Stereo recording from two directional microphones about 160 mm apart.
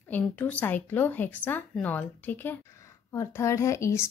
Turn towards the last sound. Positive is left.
turn(degrees=15)  # may be behind; listen again after turning